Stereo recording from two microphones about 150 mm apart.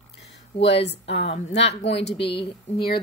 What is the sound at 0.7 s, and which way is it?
A woman's voice, 40° left (ahead or behind).